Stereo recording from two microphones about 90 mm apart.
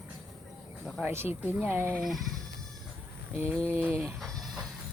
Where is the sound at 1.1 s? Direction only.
25° right (ahead or behind).